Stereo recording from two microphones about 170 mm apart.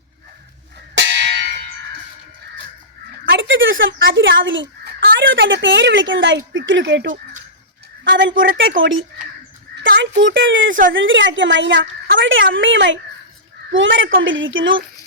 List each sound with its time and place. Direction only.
0.9 s church bell: 90° right; by 1.5 s 75° right (ahead or behind)
3.2 s speech: 90° right
8.1 s a woman's voice: 90° right